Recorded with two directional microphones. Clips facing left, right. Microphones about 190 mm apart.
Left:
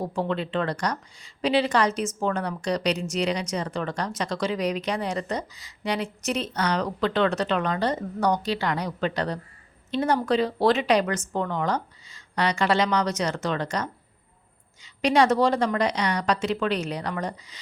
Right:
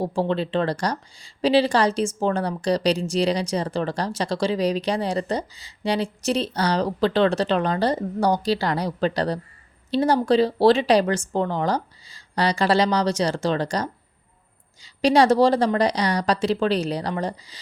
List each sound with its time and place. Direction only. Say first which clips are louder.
0.0 s a woman's voice: right 4 dB; 30° right (ahead or behind)